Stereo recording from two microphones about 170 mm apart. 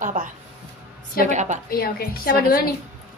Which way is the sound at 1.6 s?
60° left (ahead or behind).